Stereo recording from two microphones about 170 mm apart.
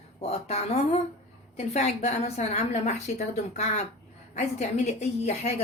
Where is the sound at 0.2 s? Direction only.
35° left (ahead or behind).